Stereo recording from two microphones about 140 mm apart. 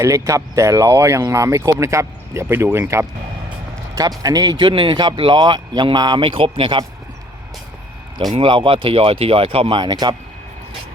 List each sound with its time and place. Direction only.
0.0 s speech: 20° right (ahead or behind)
4.2 s speech: 25° right (ahead or behind)
8.3 s speech: 35° right (ahead or behind)